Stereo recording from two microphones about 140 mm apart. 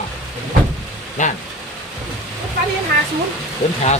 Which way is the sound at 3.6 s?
50° left (ahead or behind).